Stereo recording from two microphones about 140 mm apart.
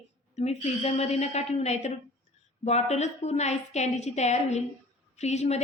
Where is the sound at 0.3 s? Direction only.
50° left (ahead or behind).